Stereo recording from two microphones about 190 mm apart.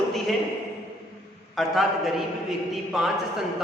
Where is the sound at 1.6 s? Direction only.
Centre (ahead or behind).